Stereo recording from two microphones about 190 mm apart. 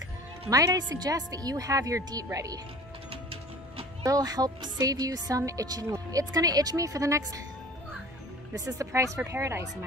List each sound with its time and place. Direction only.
0.5 s speech: 15° right (ahead or behind)
3.1 s music: 30° right (ahead or behind)
4.0 s a woman's voice: 20° right (ahead or behind)
8.5 s a woman's voice: 15° right (ahead or behind)